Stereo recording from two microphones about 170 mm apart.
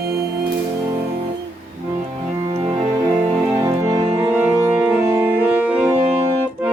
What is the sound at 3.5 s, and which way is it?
Music, 15° right (ahead or behind).